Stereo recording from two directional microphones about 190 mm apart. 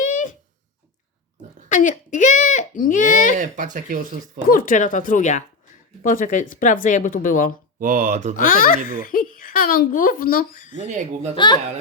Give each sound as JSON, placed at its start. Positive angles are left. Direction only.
{"t": 0.0, "sound": "a sound", "side_deg": 45}
{"t": 1.7, "sound": "speech", "side_deg": 40}
{"t": 3.3, "sound": "speech", "side_deg": -40}
{"t": 4.4, "sound": "speech", "side_deg": 45}
{"t": 7.8, "sound": "speech", "side_deg": -45}
{"t": 8.4, "sound": "speech", "side_deg": 45}
{"t": 10.8, "sound": "speech", "side_deg": -40}
{"t": 11.3, "sound": "speech", "side_deg": 25}